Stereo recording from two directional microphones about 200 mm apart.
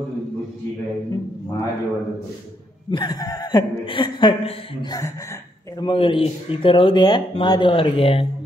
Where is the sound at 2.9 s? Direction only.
20° left (ahead or behind).